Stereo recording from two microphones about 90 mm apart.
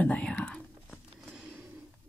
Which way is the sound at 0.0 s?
10° left (ahead or behind).